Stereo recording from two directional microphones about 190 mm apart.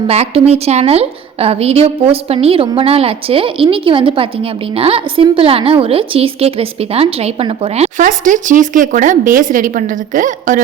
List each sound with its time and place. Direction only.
0.1 s a woman's voice: 35° right (ahead or behind)